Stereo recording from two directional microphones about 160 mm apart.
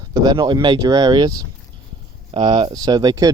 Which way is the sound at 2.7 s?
25° right (ahead or behind).